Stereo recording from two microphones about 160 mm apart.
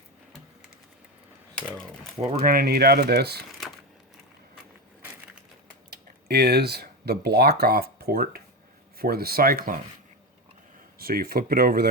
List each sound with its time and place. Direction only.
1.5 s speech: 5° left (ahead or behind)
2.5 s speech: 70° right (ahead or behind)
6.2 s speech: 85° right; by 9.7 s 65° right (ahead or behind)
10.9 s speech: 70° right (ahead or behind)